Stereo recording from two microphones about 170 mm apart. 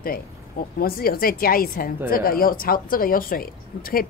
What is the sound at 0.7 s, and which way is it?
A woman's voice, 60° left (ahead or behind).